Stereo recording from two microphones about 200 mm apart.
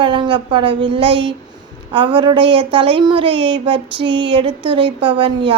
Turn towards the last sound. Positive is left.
turn(degrees=-25)  # may be behind; listen again after turning